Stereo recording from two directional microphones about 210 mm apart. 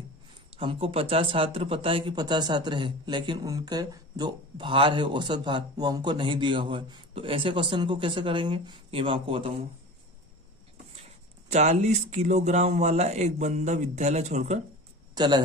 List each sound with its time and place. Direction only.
0.6 s speech: 25° right (ahead or behind)
11.1 s speech: 30° right (ahead or behind)
15.1 s speech: 20° right (ahead or behind)